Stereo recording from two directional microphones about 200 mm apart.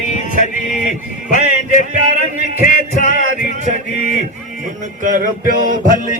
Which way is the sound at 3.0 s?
40° left (ahead or behind).